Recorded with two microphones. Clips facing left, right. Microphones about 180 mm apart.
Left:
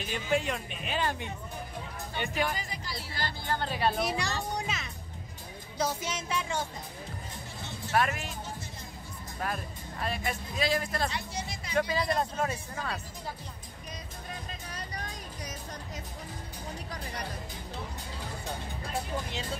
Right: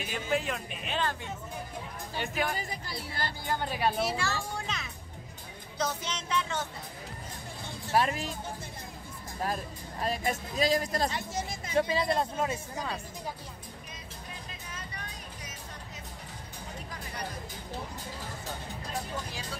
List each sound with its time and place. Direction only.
0.0 s speech: 5° right (ahead or behind)
2.1 s speech: centre (ahead or behind)
3.4 s speech: 10° right (ahead or behind)
4.0 s speech: 15° left (ahead or behind)
4.6 s speech: centre (ahead or behind)
7.9 s speech: 30° right (ahead or behind)
9.4 s speech: 35° right (ahead or behind)
11.7 s speech: 25° right (ahead or behind)
14.7 s music: 35° left (ahead or behind)